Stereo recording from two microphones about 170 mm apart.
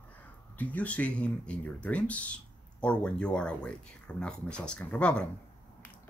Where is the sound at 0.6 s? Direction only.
10° left (ahead or behind).